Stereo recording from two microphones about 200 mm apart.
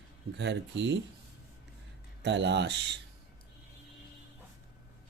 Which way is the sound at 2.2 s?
60° right (ahead or behind).